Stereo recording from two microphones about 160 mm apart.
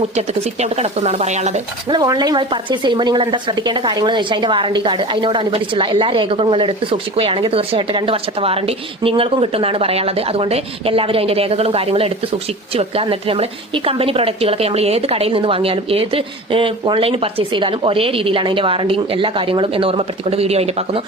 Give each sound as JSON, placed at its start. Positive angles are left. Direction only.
{"t": 0.2, "sound": "speech", "side_deg": -40}
{"t": 1.9, "sound": "speech", "side_deg": -25}